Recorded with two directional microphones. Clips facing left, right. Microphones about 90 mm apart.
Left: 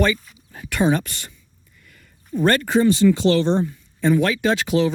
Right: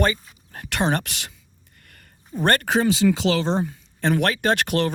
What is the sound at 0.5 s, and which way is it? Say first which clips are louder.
Speech: left 3 dB; 65° right (ahead or behind).